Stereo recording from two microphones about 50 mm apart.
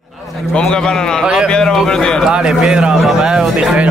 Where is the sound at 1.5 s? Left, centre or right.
Centre.